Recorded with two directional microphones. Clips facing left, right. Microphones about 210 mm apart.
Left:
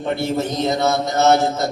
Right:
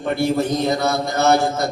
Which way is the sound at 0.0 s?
20° left (ahead or behind).